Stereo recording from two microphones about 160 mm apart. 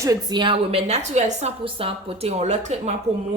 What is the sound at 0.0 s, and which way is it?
Speech, 25° right (ahead or behind).